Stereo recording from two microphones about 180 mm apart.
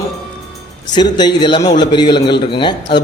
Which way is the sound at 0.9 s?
25° left (ahead or behind).